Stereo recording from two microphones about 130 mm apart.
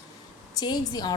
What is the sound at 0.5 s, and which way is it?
Speech, 30° left (ahead or behind).